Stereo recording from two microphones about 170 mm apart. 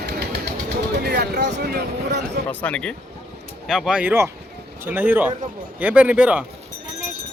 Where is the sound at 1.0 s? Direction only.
75° right (ahead or behind).